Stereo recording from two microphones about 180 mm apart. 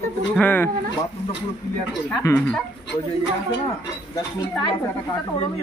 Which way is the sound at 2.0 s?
10° left (ahead or behind).